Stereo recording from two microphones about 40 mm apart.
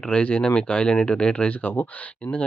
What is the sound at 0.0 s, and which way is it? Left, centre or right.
Speech, left.